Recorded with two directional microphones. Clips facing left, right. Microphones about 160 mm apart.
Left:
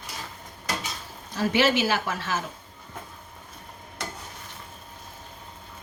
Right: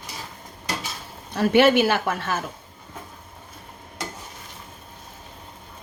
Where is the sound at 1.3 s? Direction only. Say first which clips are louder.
Right 6 dB; 60° right (ahead or behind).